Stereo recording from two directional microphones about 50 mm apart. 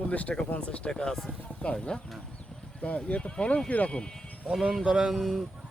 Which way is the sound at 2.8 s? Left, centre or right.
Left.